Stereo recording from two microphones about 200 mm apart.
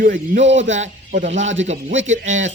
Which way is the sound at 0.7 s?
35° right (ahead or behind).